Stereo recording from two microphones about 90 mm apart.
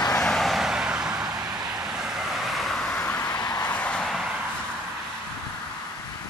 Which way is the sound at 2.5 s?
5° left (ahead or behind).